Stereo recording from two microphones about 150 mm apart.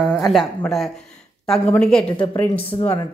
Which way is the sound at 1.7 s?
5° left (ahead or behind).